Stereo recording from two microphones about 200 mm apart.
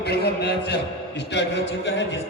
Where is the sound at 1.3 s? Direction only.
60° left (ahead or behind).